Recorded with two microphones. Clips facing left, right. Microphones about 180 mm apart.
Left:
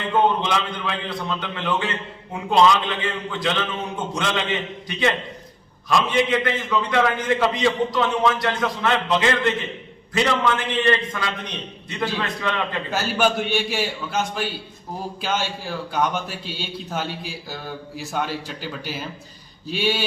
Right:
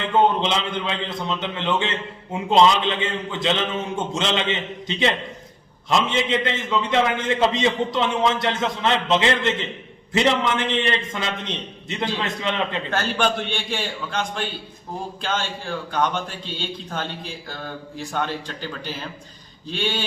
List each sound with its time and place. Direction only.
0.4 s a man's voice: 20° right (ahead or behind)
12.9 s a man's voice: 5° left (ahead or behind)